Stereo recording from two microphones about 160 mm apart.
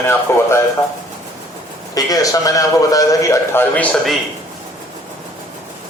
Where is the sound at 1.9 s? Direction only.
20° left (ahead or behind); by 4.2 s 5° left (ahead or behind).